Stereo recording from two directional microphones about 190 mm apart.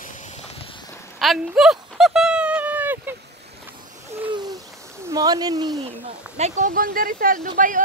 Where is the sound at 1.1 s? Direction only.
Centre (ahead or behind).